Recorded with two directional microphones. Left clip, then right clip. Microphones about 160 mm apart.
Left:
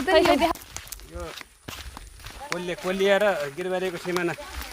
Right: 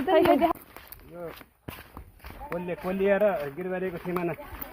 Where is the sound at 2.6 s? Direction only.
30° left (ahead or behind).